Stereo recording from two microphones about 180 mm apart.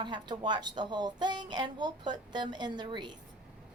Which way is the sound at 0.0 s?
25° right (ahead or behind).